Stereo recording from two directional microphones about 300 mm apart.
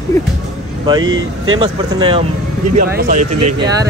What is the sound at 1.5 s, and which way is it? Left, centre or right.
Speech, centre.